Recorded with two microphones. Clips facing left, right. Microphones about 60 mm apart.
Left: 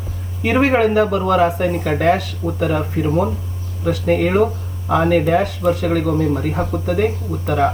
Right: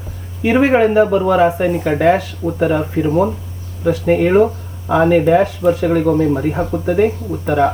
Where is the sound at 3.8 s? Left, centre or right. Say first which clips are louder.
Right 3 dB; centre.